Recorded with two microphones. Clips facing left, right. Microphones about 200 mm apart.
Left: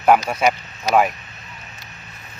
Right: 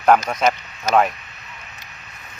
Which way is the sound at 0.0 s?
5° left (ahead or behind).